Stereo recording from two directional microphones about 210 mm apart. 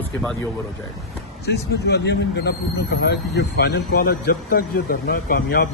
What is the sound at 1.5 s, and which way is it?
Speech, 55° left (ahead or behind).